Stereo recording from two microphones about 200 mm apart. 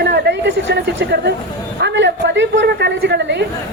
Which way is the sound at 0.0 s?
60° right (ahead or behind).